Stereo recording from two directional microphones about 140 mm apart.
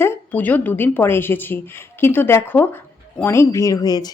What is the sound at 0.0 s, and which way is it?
A woman's voice, 15° left (ahead or behind).